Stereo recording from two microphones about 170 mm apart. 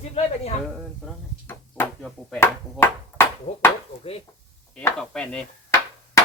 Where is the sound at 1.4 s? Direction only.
15° left (ahead or behind).